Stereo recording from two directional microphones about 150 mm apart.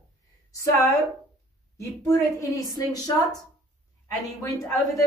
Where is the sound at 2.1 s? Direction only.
20° left (ahead or behind).